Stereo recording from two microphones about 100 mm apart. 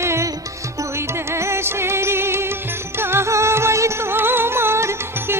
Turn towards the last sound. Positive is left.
turn(degrees=-25)  # may be behind; listen again after turning